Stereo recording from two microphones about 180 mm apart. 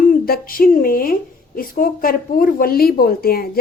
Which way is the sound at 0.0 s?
55° left (ahead or behind).